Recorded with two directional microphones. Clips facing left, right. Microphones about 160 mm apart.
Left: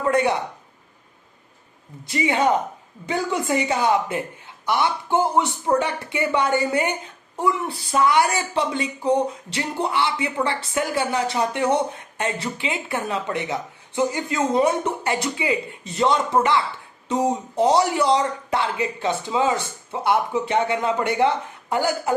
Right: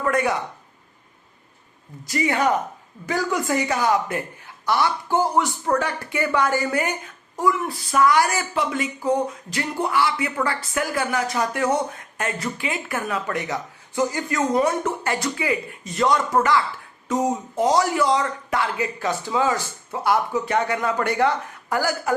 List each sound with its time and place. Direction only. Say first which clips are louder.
0.0 s a woman's voice: left 2 dB; 25° left (ahead or behind)
2.0 s a woman's voice: left 1 dB; 20° left (ahead or behind)